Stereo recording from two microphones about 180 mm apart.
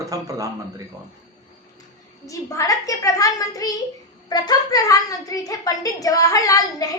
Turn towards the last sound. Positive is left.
turn(degrees=20)  # may be behind; listen again after turning